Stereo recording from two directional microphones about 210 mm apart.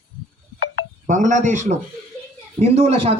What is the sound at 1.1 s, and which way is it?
Speech, 35° right (ahead or behind).